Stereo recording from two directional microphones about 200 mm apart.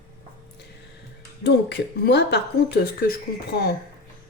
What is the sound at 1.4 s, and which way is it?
Speech, 55° left (ahead or behind).